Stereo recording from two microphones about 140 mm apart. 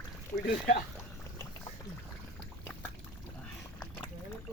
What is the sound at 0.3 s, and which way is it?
Speech, 20° left (ahead or behind).